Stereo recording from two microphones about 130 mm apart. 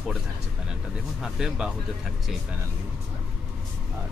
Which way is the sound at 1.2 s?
5° right (ahead or behind).